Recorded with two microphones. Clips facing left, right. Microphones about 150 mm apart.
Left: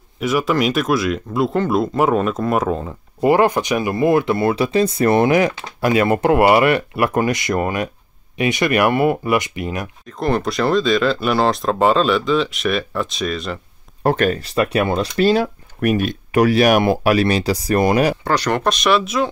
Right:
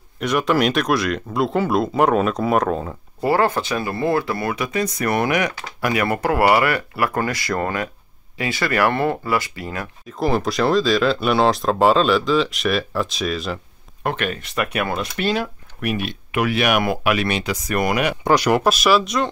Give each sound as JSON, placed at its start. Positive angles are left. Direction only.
{"t": 0.2, "sound": "speech", "side_deg": 5}
{"t": 3.2, "sound": "speech", "side_deg": 15}
{"t": 10.0, "sound": "speech", "side_deg": 0}
{"t": 14.0, "sound": "speech", "side_deg": 40}
{"t": 18.2, "sound": "speech", "side_deg": -10}